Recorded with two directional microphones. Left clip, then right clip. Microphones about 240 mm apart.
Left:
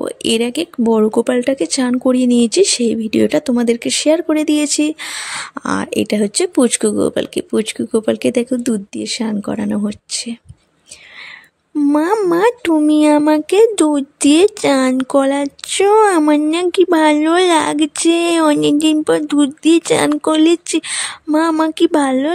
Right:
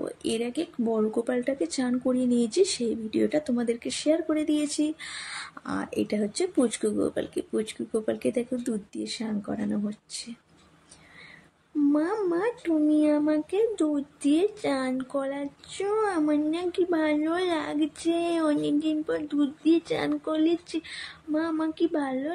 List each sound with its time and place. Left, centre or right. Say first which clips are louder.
0.0 s speech: left 13 dB; left
11.8 s speech: left 11 dB; left